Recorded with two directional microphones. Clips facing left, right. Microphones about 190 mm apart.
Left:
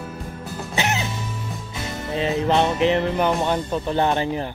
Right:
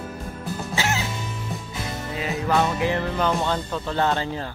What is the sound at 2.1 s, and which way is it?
Music, 25° left (ahead or behind).